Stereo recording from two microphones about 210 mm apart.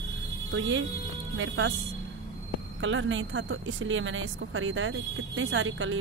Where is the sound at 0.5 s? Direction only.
65° right (ahead or behind).